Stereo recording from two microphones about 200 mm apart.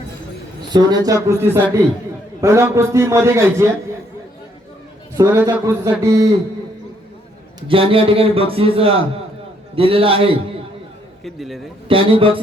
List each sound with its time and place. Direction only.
0.7 s a man's voice: 20° right (ahead or behind)
5.1 s a man's voice: 15° right (ahead or behind)
7.7 s a man's voice: 25° right (ahead or behind)
11.2 s a man's voice: centre (ahead or behind)
11.9 s a man's voice: 25° right (ahead or behind)